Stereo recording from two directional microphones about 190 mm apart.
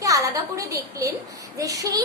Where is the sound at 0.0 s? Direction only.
15° right (ahead or behind).